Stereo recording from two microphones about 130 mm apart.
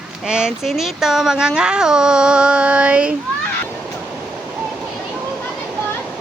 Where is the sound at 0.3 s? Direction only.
5° right (ahead or behind).